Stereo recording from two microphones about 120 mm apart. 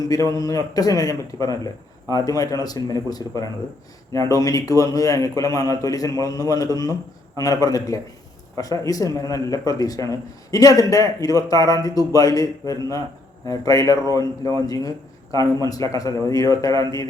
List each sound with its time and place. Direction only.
0.1 s speech: 30° left (ahead or behind)